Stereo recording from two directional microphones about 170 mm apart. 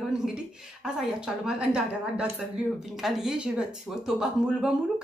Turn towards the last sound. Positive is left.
turn(degrees=-5)  # may be behind; listen again after turning